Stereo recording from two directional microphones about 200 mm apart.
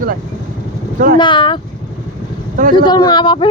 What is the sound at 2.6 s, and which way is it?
Speech, 45° right (ahead or behind).